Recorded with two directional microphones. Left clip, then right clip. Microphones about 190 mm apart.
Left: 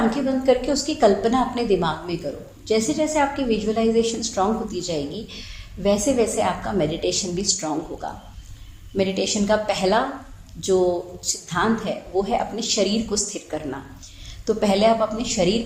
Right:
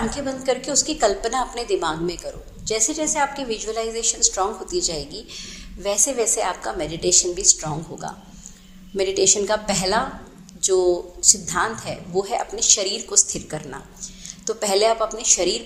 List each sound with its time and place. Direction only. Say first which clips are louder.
0.1 s a woman's voice: left 4 dB; 25° right (ahead or behind)